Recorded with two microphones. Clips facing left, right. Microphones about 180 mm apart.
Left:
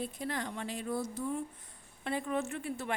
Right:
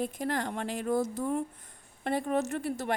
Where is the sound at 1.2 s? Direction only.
60° right (ahead or behind).